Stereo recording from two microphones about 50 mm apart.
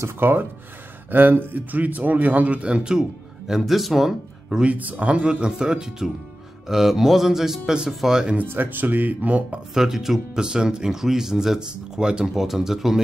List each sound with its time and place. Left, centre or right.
0.2 s speech: right; by 4.6 s centre
4.7 s speech: right
8.5 s speech: right
9.8 s speech: centre
10.4 s speech: centre